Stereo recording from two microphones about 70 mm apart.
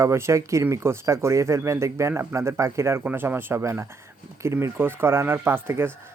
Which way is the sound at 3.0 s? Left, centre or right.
Right.